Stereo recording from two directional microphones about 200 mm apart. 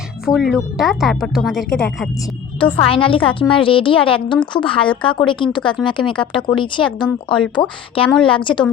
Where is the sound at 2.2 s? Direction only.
25° left (ahead or behind).